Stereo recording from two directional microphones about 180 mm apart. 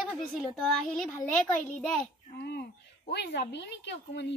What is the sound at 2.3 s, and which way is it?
A woman's voice, 65° left (ahead or behind).